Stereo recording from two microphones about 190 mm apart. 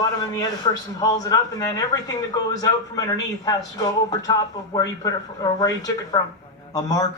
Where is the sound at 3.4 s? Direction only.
20° left (ahead or behind).